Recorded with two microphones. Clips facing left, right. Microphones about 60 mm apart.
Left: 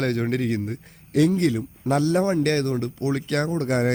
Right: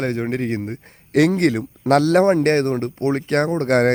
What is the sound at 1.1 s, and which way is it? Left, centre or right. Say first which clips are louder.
Speech: right 4 dB; right.